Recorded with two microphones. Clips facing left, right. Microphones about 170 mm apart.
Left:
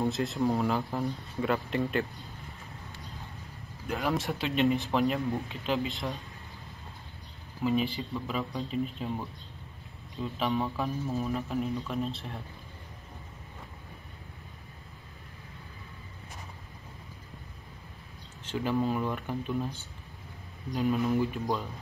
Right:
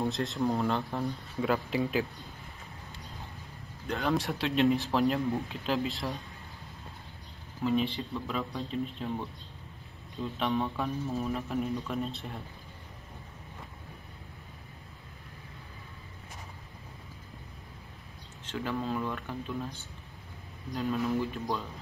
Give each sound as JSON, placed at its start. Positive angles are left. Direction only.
{"t": 0.0, "sound": "speech", "side_deg": 0}
{"t": 3.8, "sound": "speech", "side_deg": 5}
{"t": 7.6, "sound": "speech", "side_deg": 0}
{"t": 18.5, "sound": "speech", "side_deg": 15}
{"t": 20.7, "sound": "speech", "side_deg": 15}